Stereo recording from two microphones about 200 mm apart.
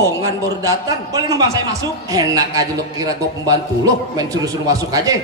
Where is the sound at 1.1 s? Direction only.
20° right (ahead or behind).